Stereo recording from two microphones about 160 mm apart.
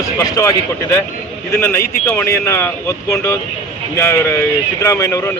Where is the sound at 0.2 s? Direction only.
20° left (ahead or behind).